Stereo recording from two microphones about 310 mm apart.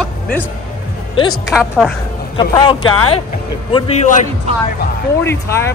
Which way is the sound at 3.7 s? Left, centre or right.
Centre.